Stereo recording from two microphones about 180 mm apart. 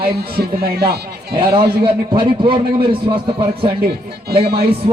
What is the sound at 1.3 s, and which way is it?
A man's voice, 30° right (ahead or behind).